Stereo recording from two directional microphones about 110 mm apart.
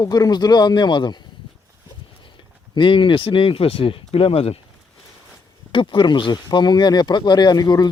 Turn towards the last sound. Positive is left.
turn(degrees=40)  # may be behind; listen again after turning